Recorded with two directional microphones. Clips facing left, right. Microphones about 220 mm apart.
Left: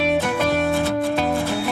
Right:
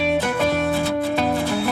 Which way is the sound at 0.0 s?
Centre (ahead or behind).